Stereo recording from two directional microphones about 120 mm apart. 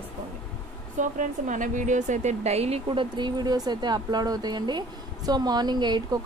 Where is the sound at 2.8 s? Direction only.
40° right (ahead or behind).